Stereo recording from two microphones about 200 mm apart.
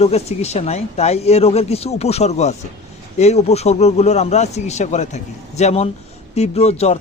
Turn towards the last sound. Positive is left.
turn(degrees=30)  # may be behind; listen again after turning